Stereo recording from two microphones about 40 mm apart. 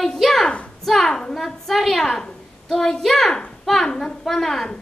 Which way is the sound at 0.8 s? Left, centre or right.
Centre.